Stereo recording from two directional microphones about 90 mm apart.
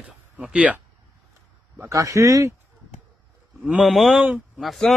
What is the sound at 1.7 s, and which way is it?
Speech, 35° right (ahead or behind).